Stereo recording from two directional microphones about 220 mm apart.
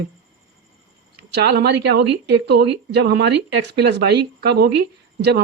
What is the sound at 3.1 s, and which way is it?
A woman's voice, 50° right (ahead or behind).